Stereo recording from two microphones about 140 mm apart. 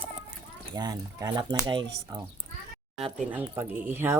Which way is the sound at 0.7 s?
30° right (ahead or behind).